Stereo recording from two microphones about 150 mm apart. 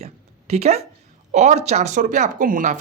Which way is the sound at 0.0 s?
45° right (ahead or behind).